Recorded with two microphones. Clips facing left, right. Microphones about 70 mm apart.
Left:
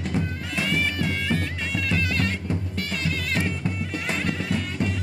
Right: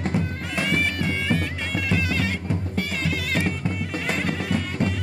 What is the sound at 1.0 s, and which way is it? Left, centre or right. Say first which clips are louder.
Music: right 1 dB; centre.